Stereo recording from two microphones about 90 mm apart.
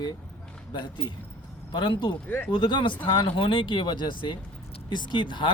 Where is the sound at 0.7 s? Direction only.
55° left (ahead or behind).